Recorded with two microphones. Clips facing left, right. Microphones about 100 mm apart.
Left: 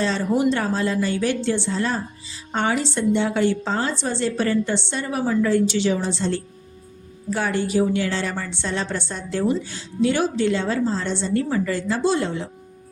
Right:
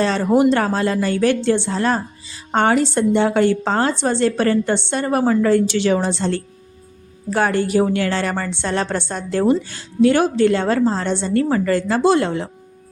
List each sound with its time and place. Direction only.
0.0 s a woman's voice: 60° right (ahead or behind)